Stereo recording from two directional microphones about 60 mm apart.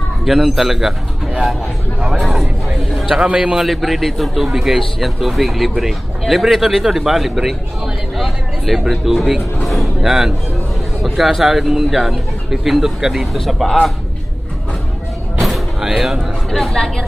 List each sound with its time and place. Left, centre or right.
0.2 s a man's voice: centre
2.0 s a sound: centre
3.1 s a man's voice: centre
3.5 s a man's voice: centre
15.4 s music: centre
16.4 s a woman's voice: centre